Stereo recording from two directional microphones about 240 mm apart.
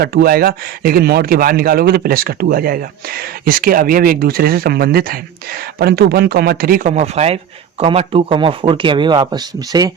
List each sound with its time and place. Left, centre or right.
0.0 s speech: right; by 9.9 s centre